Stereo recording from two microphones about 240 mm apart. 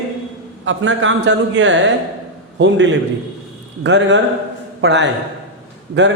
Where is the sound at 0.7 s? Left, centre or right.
Right.